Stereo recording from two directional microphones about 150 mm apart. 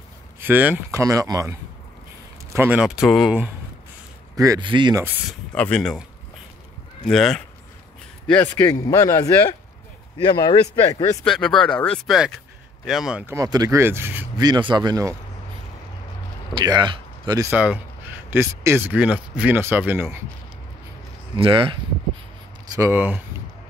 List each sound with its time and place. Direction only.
0.4 s speech: 10° right (ahead or behind)
1.0 s speech: 25° right (ahead or behind)
2.5 s speech: 10° right (ahead or behind)
4.4 s speech: 25° right (ahead or behind)
5.5 s speech: 5° left (ahead or behind)
7.1 s speech: centre (ahead or behind)
8.3 s a man's voice: 15° left (ahead or behind); by 11.1 s 30° left (ahead or behind)
11.2 s speech: 5° left (ahead or behind)
13.2 s speech: 20° right (ahead or behind)
14.4 s speech: 30° right (ahead or behind)
16.5 s speech: 30° right (ahead or behind)
17.5 s speech: 10° right (ahead or behind)
21.4 s speech: 35° right (ahead or behind)
22.8 s speech: 15° right (ahead or behind)